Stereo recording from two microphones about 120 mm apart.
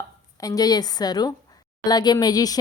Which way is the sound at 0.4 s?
30° left (ahead or behind).